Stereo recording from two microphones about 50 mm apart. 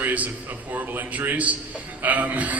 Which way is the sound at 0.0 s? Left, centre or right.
Right.